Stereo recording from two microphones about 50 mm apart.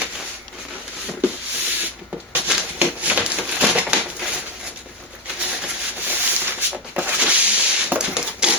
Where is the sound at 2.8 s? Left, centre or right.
Right.